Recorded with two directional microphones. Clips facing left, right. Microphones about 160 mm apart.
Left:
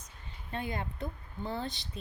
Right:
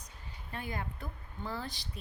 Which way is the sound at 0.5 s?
25° left (ahead or behind).